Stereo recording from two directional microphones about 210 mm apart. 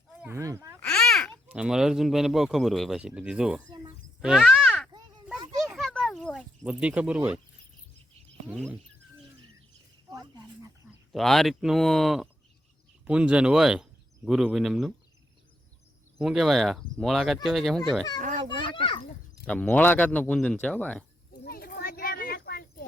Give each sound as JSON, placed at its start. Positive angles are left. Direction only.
{"t": 0.1, "sound": "a sound", "side_deg": -10}
{"t": 0.8, "sound": "speech", "side_deg": 5}
{"t": 5.6, "sound": "a sound", "side_deg": 0}
{"t": 6.7, "sound": "speech", "side_deg": -5}
{"t": 8.4, "sound": "speech", "side_deg": 0}
{"t": 10.1, "sound": "a sound", "side_deg": -15}
{"t": 11.1, "sound": "speech", "side_deg": 0}
{"t": 16.1, "sound": "speech", "side_deg": 0}
{"t": 18.2, "sound": "a child's voice", "side_deg": -40}
{"t": 18.8, "sound": "a sound", "side_deg": 25}
{"t": 19.5, "sound": "speech", "side_deg": 5}
{"t": 21.4, "sound": "children playing", "side_deg": 45}